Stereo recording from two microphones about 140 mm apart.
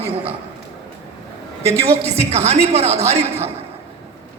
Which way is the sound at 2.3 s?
50° right (ahead or behind).